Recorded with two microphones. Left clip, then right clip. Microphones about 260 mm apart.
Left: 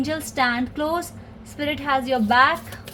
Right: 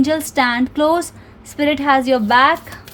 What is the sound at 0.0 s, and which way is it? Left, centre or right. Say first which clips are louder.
A woman's voice: right 6 dB; right.